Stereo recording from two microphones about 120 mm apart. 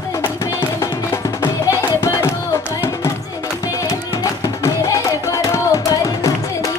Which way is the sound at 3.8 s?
30° left (ahead or behind).